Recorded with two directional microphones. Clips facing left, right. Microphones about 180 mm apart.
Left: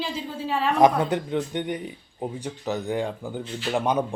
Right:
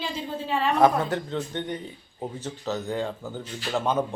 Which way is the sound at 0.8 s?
15° left (ahead or behind).